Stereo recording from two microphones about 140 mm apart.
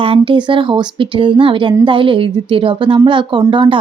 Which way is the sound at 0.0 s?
40° right (ahead or behind).